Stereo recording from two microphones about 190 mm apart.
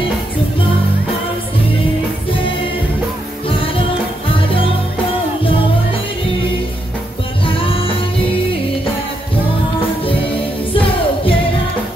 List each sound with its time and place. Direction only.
3.4 s music: 30° left (ahead or behind)
7.4 s music: 30° left (ahead or behind)
10.7 s music: 30° left (ahead or behind)